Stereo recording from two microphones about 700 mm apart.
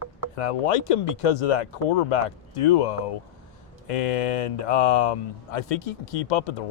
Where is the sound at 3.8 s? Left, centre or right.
Left.